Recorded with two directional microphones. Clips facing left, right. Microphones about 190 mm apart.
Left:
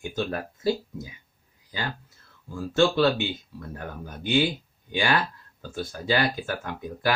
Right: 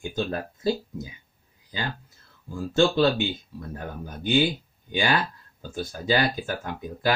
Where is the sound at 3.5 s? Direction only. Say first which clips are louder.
Right 2 dB; 15° right (ahead or behind).